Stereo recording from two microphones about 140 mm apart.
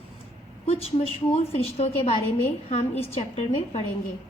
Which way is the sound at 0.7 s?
50° left (ahead or behind).